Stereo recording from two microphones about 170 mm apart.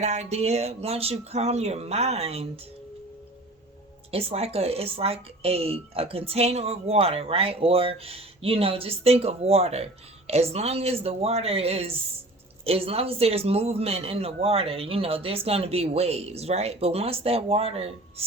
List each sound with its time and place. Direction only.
0.0 s speech: 40° right (ahead or behind)
4.1 s speech: 35° right (ahead or behind)